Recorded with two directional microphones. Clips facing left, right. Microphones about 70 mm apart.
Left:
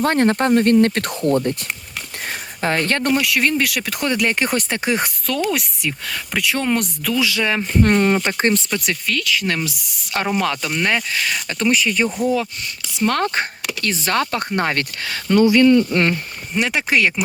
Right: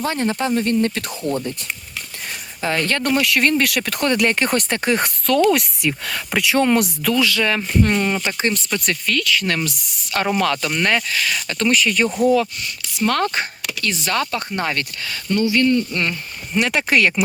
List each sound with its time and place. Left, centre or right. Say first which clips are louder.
0.0 s speech: left 5 dB; left
2.6 s speech: left 1 dB; left
3.1 s speech: right 2 dB; centre
7.2 s speech: left 1 dB; centre
7.8 s speech: left 4 dB; left
8.7 s speech: right 1 dB; centre
11.1 s speech: even; left
13.0 s speech: even; left
15.8 s speech: left 5 dB; left
16.6 s speech: right 1 dB; centre